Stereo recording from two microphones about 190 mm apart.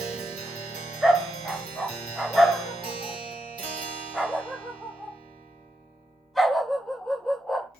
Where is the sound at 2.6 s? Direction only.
35° left (ahead or behind).